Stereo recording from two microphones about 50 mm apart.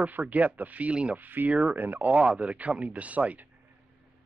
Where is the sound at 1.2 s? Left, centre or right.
Right.